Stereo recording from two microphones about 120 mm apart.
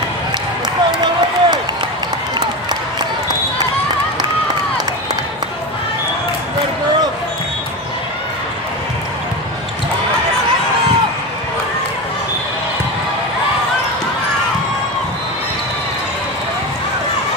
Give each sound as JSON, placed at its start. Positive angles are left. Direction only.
{"t": 0.9, "sound": "run", "side_deg": -35}